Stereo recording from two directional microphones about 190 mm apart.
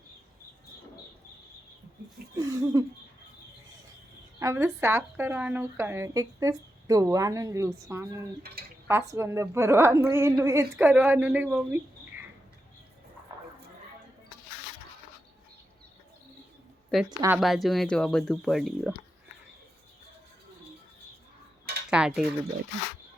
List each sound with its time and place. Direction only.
2.4 s speech: 20° right (ahead or behind)
4.4 s speech: 15° right (ahead or behind)
17.1 s a woman's voice: 20° right (ahead or behind)
17.3 s speech: centre (ahead or behind)
21.8 s speech: 5° right (ahead or behind)